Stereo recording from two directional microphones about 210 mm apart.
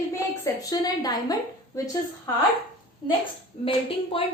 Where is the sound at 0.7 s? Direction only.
20° left (ahead or behind).